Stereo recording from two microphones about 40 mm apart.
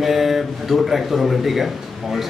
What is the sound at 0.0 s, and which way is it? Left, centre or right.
Speech, centre.